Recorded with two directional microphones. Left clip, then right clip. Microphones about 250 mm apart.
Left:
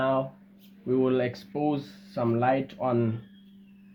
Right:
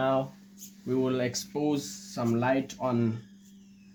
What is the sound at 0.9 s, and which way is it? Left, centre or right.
Speech, centre.